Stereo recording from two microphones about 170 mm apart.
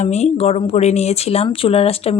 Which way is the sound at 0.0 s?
40° left (ahead or behind).